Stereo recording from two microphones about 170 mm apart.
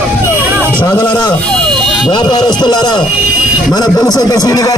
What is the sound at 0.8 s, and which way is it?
A man's voice, 25° left (ahead or behind).